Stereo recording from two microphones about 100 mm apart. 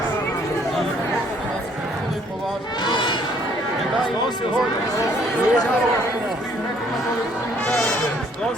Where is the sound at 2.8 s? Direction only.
50° left (ahead or behind).